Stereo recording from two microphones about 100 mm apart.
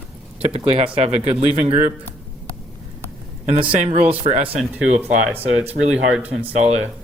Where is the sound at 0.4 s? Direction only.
90° right.